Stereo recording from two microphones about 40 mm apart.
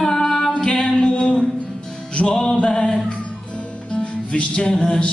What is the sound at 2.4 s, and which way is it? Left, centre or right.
Choir, centre.